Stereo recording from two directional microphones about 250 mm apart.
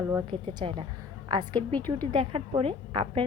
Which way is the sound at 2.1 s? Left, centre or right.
Centre.